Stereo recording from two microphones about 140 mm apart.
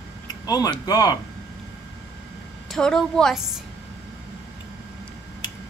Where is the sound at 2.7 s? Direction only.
5° left (ahead or behind).